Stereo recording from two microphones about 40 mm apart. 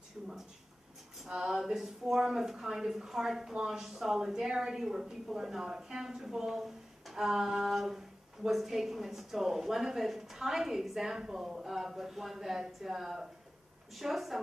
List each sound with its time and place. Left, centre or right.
1.2 s speech: centre